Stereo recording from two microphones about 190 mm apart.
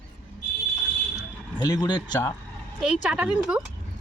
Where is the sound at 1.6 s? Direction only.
20° left (ahead or behind).